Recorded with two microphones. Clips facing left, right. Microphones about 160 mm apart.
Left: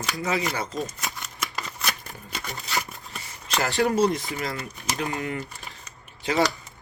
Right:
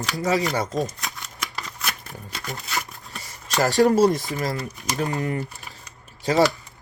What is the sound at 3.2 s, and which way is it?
Speech, 40° right (ahead or behind).